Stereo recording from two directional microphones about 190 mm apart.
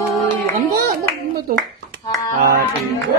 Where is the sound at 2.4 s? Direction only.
50° right (ahead or behind).